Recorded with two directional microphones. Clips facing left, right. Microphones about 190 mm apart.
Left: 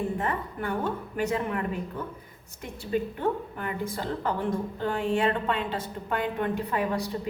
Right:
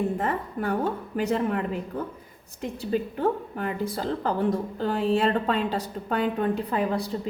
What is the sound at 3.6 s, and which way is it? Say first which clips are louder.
Speech: right 3 dB; 35° right (ahead or behind).